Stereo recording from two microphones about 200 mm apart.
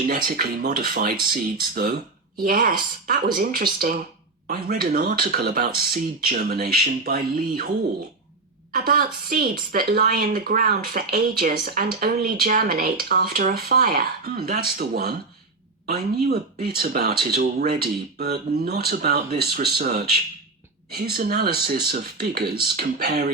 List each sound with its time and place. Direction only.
0.1 s speech: 45° right (ahead or behind)
8.7 s speech: 45° right (ahead or behind)